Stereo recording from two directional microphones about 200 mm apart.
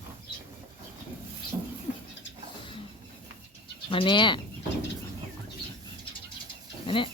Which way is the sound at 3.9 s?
25° left (ahead or behind).